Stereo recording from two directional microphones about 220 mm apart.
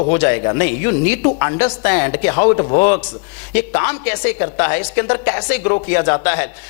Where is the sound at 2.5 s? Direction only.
25° left (ahead or behind).